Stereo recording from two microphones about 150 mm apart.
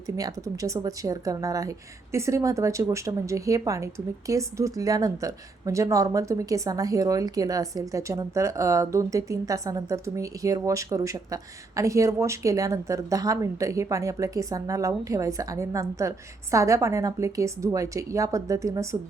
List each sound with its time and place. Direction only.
0.2 s a woman's voice: 25° right (ahead or behind)